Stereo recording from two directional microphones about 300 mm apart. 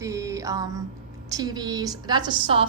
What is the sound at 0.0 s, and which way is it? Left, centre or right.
Music, centre.